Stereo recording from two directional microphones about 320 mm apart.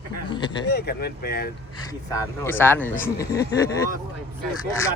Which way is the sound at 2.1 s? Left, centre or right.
Centre.